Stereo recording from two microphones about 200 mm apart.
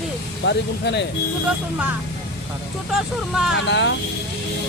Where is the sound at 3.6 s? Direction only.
65° left (ahead or behind).